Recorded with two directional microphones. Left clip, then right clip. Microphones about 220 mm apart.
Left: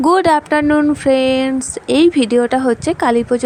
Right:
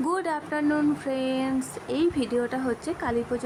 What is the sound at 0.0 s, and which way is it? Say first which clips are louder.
Speech: left 16 dB; 40° left (ahead or behind).